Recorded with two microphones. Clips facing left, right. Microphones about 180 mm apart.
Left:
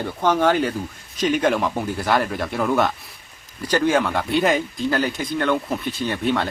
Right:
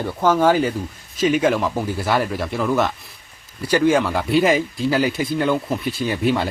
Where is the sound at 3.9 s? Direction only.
Centre (ahead or behind).